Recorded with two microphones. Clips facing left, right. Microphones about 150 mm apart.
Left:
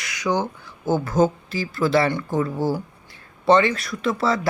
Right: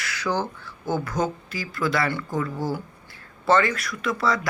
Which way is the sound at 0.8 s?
25° left (ahead or behind).